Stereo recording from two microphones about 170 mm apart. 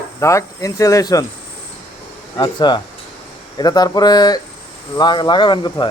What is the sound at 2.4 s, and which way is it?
Speech, 25° left (ahead or behind).